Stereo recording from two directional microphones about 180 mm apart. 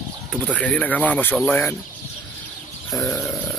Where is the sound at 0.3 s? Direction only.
5° left (ahead or behind).